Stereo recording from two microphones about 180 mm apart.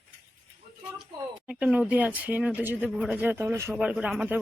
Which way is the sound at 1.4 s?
5° right (ahead or behind).